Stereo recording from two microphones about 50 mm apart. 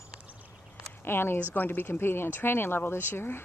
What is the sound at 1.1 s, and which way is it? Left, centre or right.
Speech, left.